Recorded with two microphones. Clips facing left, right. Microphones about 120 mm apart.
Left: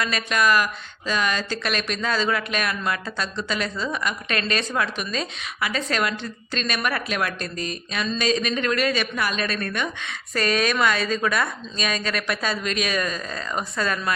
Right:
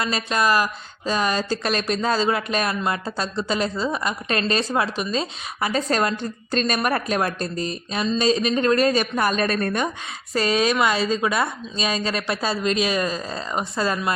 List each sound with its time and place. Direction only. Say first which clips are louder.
0.0 s speech: right 1 dB; 30° right (ahead or behind)